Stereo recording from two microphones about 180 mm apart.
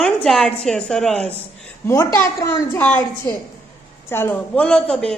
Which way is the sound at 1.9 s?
15° left (ahead or behind).